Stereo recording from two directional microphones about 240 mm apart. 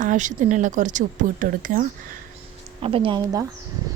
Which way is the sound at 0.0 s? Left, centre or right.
Right.